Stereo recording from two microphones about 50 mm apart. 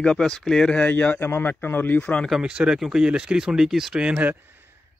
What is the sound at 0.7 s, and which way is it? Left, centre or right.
Speech, left.